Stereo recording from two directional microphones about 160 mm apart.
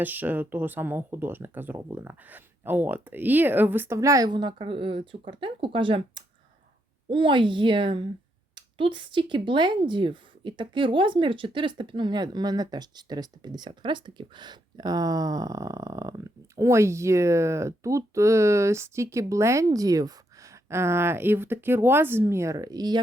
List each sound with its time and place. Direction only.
0.0 s a woman's voice: 10° right (ahead or behind)